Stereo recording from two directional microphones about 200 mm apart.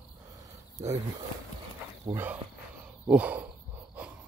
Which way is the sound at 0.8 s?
15° right (ahead or behind).